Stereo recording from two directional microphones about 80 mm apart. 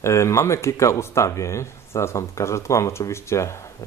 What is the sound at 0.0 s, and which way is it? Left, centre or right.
Speech, left.